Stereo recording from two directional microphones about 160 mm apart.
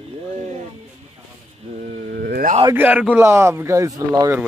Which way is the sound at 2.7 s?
10° right (ahead or behind).